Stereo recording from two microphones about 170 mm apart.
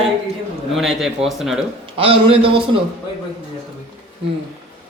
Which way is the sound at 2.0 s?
30° right (ahead or behind).